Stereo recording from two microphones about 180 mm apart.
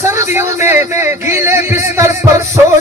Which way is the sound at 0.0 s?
15° right (ahead or behind).